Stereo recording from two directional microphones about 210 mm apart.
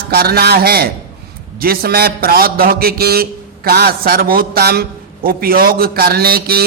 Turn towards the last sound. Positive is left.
turn(degrees=-45)  # may be behind; listen again after turning